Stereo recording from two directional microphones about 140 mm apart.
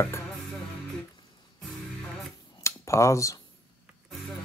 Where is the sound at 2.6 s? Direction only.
20° left (ahead or behind).